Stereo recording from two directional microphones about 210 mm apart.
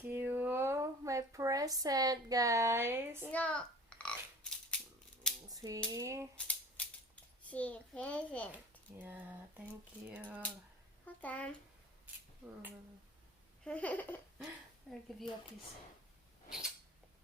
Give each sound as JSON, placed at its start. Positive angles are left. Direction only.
{"t": 0.1, "sound": "a sound", "side_deg": -10}
{"t": 3.3, "sound": "a sound", "side_deg": 5}
{"t": 5.5, "sound": "typewriter", "side_deg": -15}
{"t": 5.9, "sound": "speech", "side_deg": -15}
{"t": 6.3, "sound": "a sound", "side_deg": 5}
{"t": 7.5, "sound": "a child's voice", "side_deg": 5}
{"t": 9.0, "sound": "speech", "side_deg": -10}
{"t": 11.0, "sound": "a child's voice", "side_deg": 5}
{"t": 13.7, "sound": "a child's voice", "side_deg": 5}